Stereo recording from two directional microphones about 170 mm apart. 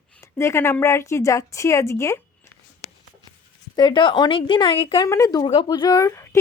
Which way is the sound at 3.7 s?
25° left (ahead or behind).